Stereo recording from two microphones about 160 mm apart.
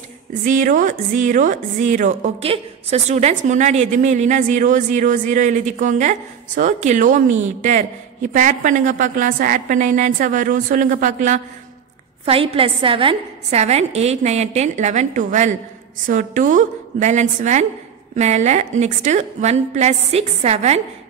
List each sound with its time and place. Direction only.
0.3 s a woman's voice: 55° right (ahead or behind)
12.3 s a woman's voice: 35° right (ahead or behind)